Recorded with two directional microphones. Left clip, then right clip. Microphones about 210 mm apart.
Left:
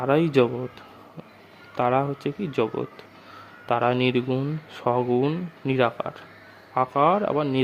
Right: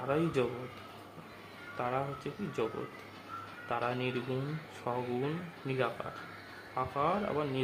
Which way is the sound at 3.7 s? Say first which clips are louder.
Left 13 dB; 50° left (ahead or behind).